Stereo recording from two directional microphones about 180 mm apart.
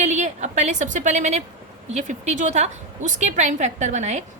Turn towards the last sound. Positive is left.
turn(degrees=-40)  # may be behind; listen again after turning